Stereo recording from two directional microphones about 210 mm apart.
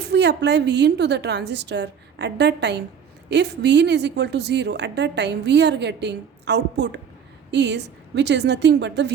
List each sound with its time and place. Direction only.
0.1 s a woman's voice: 55° right (ahead or behind)